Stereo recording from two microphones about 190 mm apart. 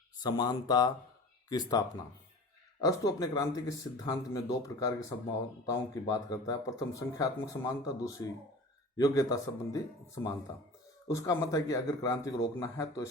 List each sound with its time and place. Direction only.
0.2 s speech: 20° left (ahead or behind)
2.8 s speech: 20° left (ahead or behind)
11.1 s speech: 15° left (ahead or behind)